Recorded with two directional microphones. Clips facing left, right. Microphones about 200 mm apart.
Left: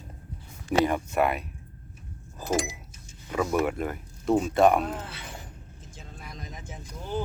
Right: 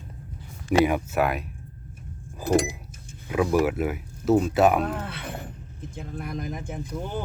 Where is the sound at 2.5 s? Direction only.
55° right (ahead or behind).